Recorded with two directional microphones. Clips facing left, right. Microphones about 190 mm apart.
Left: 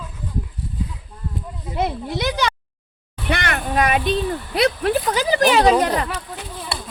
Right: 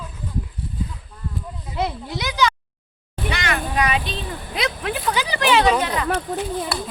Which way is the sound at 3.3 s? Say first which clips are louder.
Left 3 dB; 55° left (ahead or behind).